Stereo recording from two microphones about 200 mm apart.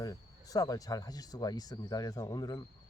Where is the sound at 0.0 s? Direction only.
15° left (ahead or behind).